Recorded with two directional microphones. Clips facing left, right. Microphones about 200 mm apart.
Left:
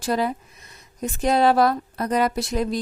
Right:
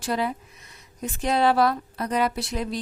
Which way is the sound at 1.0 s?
40° left (ahead or behind).